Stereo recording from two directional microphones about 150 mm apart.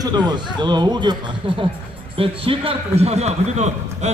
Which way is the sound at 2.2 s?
35° right (ahead or behind).